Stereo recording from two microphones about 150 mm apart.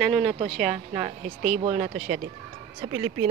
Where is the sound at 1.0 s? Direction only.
45° right (ahead or behind).